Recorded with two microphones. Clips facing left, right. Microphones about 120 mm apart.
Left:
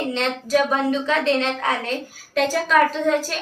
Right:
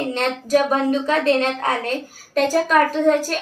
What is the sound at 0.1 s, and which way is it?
A woman's voice, 45° right (ahead or behind).